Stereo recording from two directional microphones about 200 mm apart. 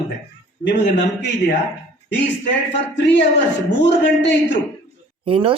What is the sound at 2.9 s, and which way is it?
Speech, 65° left (ahead or behind).